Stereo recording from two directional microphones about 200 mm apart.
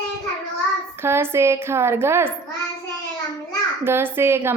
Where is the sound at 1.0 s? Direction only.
10° right (ahead or behind).